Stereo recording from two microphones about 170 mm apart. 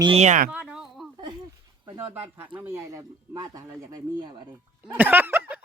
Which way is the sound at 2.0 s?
10° right (ahead or behind).